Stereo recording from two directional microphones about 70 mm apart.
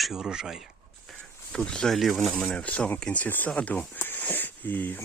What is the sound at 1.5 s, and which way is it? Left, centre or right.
Speech, centre.